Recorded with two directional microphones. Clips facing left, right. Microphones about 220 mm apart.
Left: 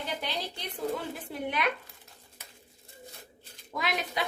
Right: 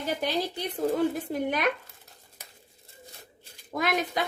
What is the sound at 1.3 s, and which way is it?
Speech, 45° right (ahead or behind).